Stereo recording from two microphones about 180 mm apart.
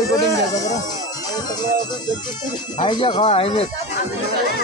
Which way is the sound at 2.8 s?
25° left (ahead or behind).